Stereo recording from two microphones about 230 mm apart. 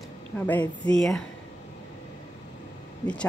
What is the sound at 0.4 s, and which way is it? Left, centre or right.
Speech, centre.